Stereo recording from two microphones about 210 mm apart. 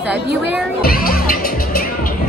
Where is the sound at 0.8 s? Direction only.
45° left (ahead or behind).